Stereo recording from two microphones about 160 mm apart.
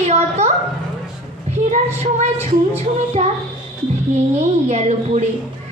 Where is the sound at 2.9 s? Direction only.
45° right (ahead or behind).